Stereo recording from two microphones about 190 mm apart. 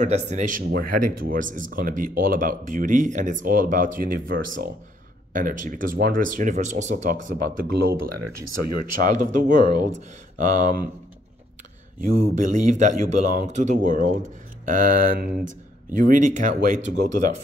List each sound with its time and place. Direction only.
0.0 s speech: 35° right (ahead or behind); by 8.0 s 55° right (ahead or behind)
8.7 s speech: 45° right (ahead or behind)
12.4 s speech: 40° right (ahead or behind)